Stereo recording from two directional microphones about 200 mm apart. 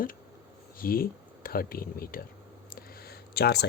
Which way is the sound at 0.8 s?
45° left (ahead or behind).